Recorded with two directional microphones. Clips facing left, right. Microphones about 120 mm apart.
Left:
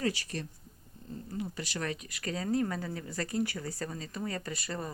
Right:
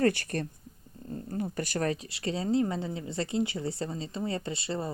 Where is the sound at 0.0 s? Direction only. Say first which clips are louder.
Right 7 dB; 55° right (ahead or behind).